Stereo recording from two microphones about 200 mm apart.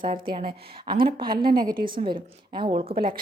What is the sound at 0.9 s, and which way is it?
Speech, 45° right (ahead or behind).